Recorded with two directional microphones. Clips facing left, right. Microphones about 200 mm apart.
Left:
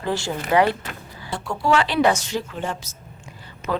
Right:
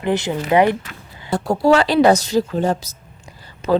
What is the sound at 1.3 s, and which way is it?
Speech, 40° right (ahead or behind).